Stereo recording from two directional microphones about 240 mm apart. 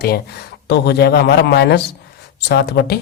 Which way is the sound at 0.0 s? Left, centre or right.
Left.